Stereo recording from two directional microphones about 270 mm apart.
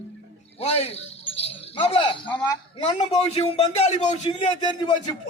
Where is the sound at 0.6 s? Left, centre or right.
Left.